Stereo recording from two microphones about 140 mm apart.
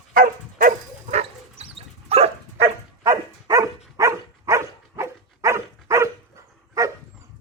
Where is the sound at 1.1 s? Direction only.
50° right (ahead or behind).